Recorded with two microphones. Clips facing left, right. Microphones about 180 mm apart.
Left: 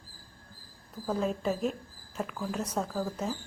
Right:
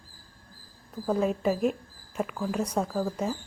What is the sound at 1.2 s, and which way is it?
Speech, centre (ahead or behind).